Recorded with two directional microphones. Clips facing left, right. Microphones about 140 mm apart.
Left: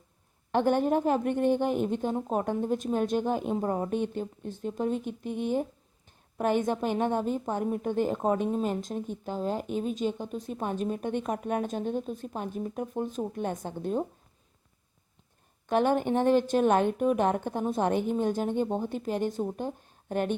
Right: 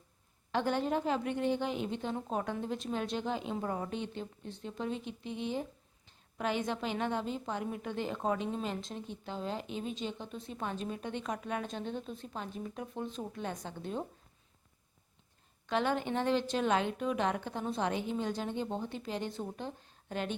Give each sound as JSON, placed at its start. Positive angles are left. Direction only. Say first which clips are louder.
{"t": 0.5, "sound": "speech", "louder": "left 7 dB", "side_deg": 50}
{"t": 15.6, "sound": "a woman's voice", "louder": "left 7 dB", "side_deg": 50}